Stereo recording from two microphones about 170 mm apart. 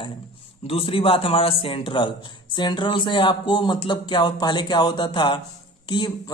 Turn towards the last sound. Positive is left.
turn(degrees=25)  # may be behind; listen again after turning